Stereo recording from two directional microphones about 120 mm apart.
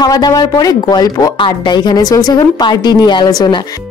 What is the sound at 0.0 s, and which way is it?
Speech, 35° left (ahead or behind).